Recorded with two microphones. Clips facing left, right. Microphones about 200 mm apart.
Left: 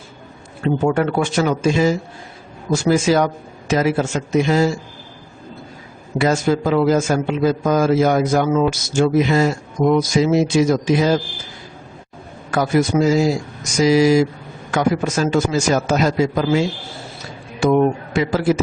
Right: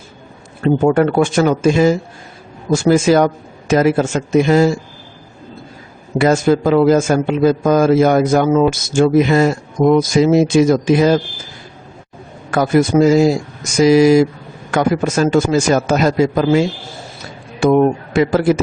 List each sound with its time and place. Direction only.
0.6 s a man's voice: 45° right (ahead or behind)
6.1 s a man's voice: 55° right (ahead or behind)
12.5 s a man's voice: 55° right (ahead or behind)